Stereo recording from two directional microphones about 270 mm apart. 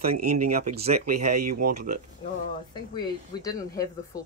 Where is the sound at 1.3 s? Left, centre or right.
Right.